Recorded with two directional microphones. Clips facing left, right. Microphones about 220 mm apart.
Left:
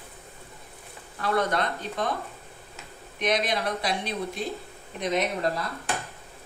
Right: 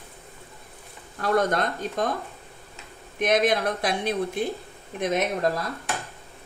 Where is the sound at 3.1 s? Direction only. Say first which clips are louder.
Right 5 dB; 50° right (ahead or behind).